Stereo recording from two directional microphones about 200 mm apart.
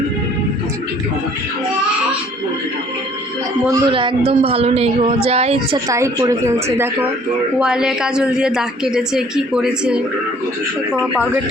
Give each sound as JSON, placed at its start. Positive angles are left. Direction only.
{"t": 3.7, "sound": "a woman's voice", "side_deg": -25}
{"t": 5.9, "sound": "speech", "side_deg": -15}
{"t": 7.6, "sound": "a woman's voice", "side_deg": -5}